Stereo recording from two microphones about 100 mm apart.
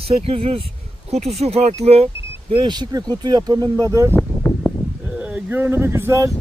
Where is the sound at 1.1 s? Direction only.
90° right.